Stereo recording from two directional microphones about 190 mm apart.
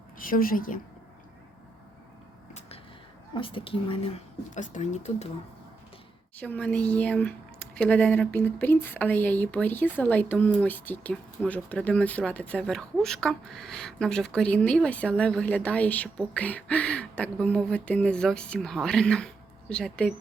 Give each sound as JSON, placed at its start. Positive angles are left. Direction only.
{"t": 0.2, "sound": "a woman's voice", "side_deg": 50}
{"t": 2.5, "sound": "a sound", "side_deg": 35}
{"t": 3.3, "sound": "a woman's voice", "side_deg": 25}
{"t": 4.5, "sound": "speech", "side_deg": 40}
{"t": 6.4, "sound": "speech", "side_deg": 5}